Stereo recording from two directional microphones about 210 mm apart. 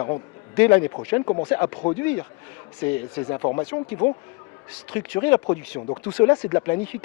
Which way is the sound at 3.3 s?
25° left (ahead or behind).